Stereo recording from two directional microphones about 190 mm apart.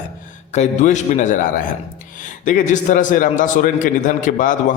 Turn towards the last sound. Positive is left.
turn(degrees=45)  # may be behind; listen again after turning